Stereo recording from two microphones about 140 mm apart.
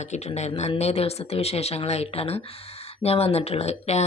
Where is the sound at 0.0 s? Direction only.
55° left (ahead or behind).